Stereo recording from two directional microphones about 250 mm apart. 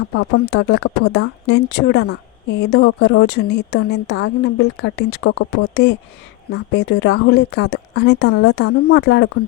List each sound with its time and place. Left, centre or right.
0.1 s speech: left